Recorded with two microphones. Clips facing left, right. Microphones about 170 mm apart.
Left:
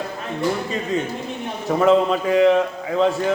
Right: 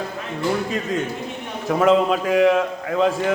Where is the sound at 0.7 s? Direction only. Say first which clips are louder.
Even; centre (ahead or behind).